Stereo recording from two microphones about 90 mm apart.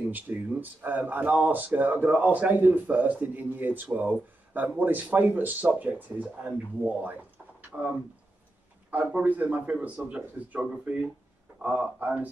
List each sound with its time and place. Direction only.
0.0 s speech: 20° right (ahead or behind)
8.9 s speech: 15° right (ahead or behind)